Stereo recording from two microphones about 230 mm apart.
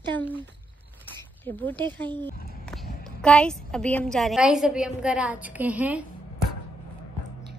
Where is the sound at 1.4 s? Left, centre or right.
Centre.